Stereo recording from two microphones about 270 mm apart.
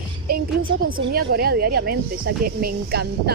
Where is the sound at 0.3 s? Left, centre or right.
Right.